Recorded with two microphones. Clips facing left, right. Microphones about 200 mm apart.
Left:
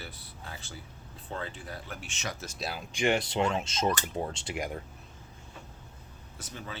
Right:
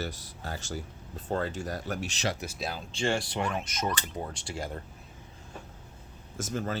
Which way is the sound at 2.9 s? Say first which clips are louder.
Left 3 dB; 15° left (ahead or behind).